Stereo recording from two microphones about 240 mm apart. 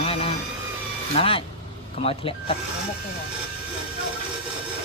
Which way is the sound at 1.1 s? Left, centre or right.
Left.